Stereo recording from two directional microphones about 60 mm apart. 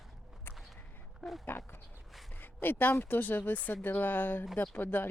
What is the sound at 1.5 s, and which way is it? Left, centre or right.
Speech, left.